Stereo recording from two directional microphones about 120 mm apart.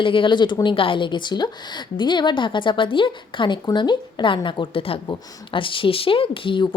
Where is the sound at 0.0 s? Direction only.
45° left (ahead or behind).